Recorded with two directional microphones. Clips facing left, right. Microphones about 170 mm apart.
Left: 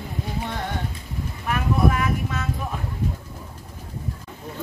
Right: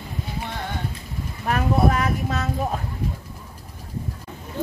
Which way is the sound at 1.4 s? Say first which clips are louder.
Right 2 dB; 40° right (ahead or behind).